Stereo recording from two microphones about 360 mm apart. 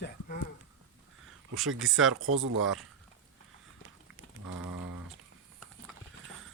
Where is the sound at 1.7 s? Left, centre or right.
Right.